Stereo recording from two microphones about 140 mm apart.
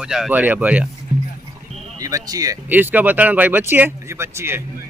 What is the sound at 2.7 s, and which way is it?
Speech, 10° right (ahead or behind).